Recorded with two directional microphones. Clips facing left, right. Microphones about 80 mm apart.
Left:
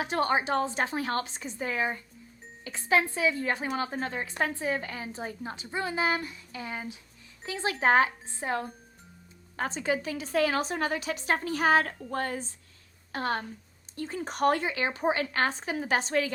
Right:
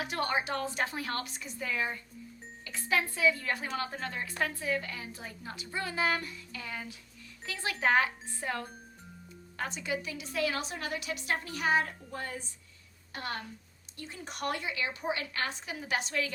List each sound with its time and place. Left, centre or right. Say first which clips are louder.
0.0 s speech: left 5 dB; left
9.6 s a woman's voice: left 6 dB; left
11.9 s a sound: left 7 dB; left
13.1 s a woman's voice: left 8 dB; left